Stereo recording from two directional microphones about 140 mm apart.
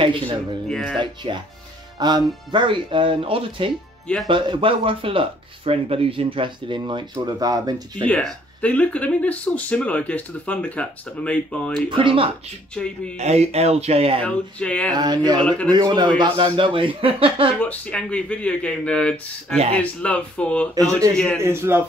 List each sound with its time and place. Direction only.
0.0 s speech: 35° right (ahead or behind)
0.7 s speech: 5° left (ahead or behind)
0.9 s speech: 35° right (ahead or behind)
8.0 s speech: 10° left (ahead or behind)
11.9 s speech: 35° right (ahead or behind)
12.7 s speech: 5° left (ahead or behind)
13.2 s speech: 50° right (ahead or behind)
14.2 s speech: 10° left (ahead or behind)
15.0 s speech: 30° right (ahead or behind)
15.4 s speech: 10° left (ahead or behind)
15.7 s speech: 30° right (ahead or behind)
17.6 s speech: 10° left (ahead or behind)
20.7 s a man's voice: 25° right (ahead or behind)